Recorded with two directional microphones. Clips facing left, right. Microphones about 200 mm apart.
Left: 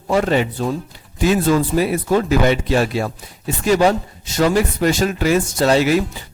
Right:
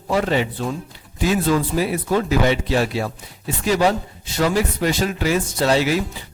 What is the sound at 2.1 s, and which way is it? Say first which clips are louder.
Speech: left 2 dB; 50° left (ahead or behind).